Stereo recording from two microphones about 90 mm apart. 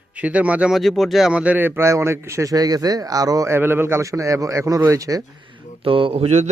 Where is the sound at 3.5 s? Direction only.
25° right (ahead or behind).